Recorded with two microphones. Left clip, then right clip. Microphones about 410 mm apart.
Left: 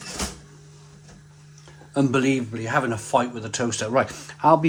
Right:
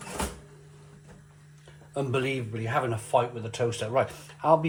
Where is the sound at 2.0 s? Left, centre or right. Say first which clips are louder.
Left 7 dB; left.